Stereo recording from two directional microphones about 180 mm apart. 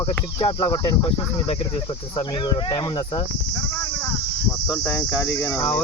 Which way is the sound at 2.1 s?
25° left (ahead or behind).